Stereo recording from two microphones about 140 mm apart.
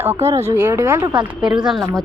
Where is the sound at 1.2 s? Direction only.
5° right (ahead or behind).